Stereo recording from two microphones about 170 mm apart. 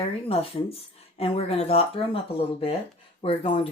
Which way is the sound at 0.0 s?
35° left (ahead or behind).